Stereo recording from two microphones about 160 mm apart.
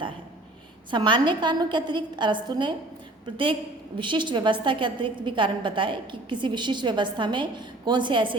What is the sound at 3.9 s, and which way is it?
A woman's voice, 30° right (ahead or behind).